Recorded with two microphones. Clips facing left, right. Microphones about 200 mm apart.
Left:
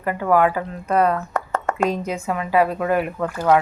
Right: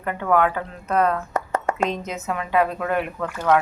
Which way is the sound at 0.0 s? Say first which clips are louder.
Left 2 dB; 5° left (ahead or behind).